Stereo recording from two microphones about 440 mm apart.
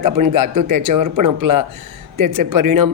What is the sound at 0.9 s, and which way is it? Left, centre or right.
A woman's voice, right.